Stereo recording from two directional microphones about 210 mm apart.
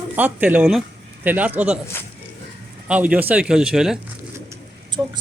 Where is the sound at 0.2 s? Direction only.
10° right (ahead or behind).